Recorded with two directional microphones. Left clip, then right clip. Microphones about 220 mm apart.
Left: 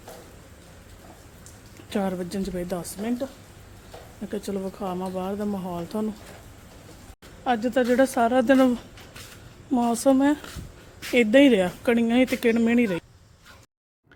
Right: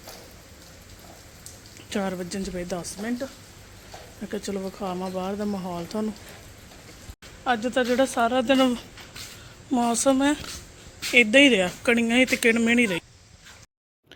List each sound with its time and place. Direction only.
1.9 s speech: 10° left (ahead or behind)
4.3 s speech: 5° left (ahead or behind)
7.4 s a woman's voice: 20° left (ahead or behind)